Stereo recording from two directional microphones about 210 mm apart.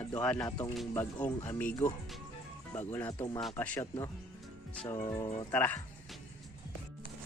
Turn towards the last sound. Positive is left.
turn(degrees=5)  # may be behind; listen again after turning